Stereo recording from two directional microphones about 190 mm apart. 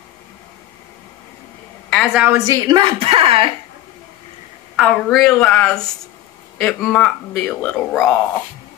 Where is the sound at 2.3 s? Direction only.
15° right (ahead or behind).